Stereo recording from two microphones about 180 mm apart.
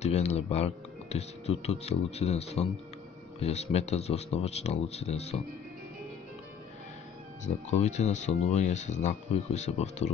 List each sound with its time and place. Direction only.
0.0 s speech: 35° left (ahead or behind)
7.4 s speech: 40° left (ahead or behind)